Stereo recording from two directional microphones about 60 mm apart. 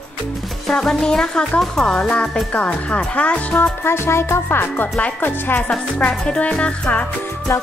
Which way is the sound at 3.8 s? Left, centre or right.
Left.